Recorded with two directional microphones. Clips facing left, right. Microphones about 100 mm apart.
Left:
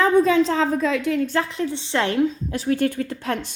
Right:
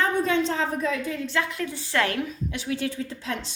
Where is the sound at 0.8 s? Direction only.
90° left.